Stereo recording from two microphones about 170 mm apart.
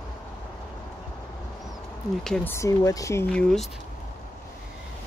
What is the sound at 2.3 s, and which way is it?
Speech, 15° left (ahead or behind).